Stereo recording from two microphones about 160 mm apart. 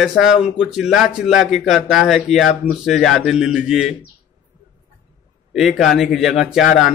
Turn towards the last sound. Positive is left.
turn(degrees=0)  # may be behind; listen again after turning